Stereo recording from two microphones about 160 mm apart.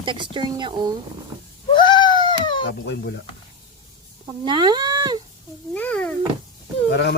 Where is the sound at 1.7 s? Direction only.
30° left (ahead or behind).